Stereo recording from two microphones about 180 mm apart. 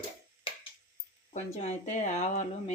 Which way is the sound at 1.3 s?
40° left (ahead or behind).